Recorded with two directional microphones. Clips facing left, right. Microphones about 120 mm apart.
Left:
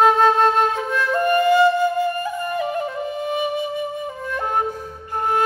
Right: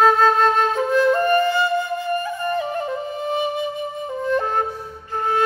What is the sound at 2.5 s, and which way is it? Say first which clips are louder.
Flute: even; 30° right (ahead or behind).